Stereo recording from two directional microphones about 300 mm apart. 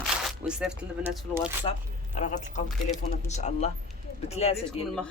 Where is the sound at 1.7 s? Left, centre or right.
Left.